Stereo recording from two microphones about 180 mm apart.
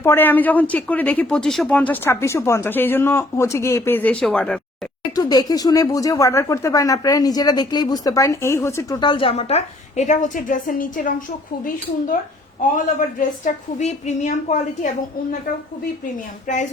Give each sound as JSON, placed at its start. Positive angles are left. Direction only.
{"t": 0.0, "sound": "speech", "side_deg": 10}
{"t": 5.1, "sound": "speech", "side_deg": 20}
{"t": 12.7, "sound": "a woman's voice", "side_deg": 45}